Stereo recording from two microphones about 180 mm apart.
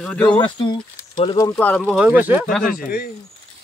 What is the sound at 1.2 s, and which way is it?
Speech, 25° left (ahead or behind).